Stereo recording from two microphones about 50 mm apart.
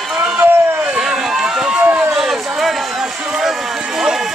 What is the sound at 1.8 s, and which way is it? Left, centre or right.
Run, right.